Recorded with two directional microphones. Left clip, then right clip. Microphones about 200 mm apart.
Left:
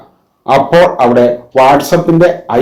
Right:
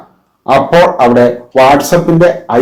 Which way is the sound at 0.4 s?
30° left (ahead or behind).